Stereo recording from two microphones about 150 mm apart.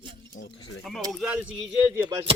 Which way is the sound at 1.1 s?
5° right (ahead or behind).